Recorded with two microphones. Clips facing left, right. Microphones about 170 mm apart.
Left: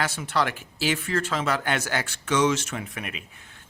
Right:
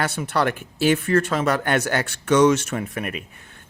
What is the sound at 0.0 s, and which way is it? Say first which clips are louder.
Speech: right 4 dB; 55° right (ahead or behind).